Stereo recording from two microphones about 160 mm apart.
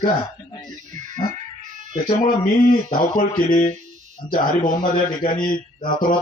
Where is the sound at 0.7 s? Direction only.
55° right (ahead or behind).